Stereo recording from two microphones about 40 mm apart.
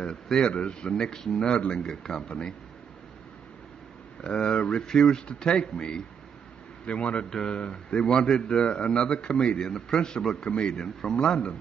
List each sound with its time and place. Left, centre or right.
0.0 s a man's voice: left
4.2 s a man's voice: left
6.9 s a man's voice: left
7.2 s speech: centre
7.5 s a man's voice: left